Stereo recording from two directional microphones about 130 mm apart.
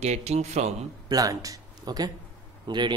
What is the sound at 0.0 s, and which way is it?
Speech, 55° right (ahead or behind).